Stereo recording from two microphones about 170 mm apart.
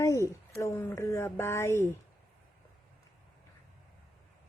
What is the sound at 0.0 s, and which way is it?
A woman's voice, 15° left (ahead or behind).